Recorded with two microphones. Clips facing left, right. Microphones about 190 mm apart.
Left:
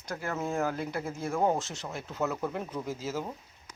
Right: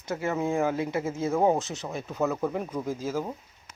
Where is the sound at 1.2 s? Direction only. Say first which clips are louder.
Right 4 dB; 20° right (ahead or behind).